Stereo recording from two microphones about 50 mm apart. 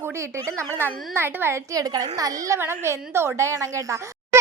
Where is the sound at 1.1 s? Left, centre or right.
Right.